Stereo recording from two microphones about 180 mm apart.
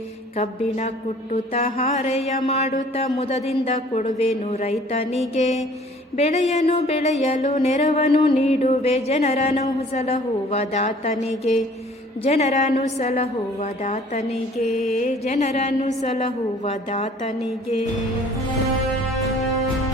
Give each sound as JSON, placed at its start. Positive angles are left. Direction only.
{"t": 0.3, "sound": "music", "side_deg": 40}